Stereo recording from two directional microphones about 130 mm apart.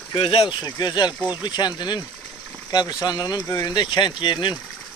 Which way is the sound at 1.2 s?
15° right (ahead or behind).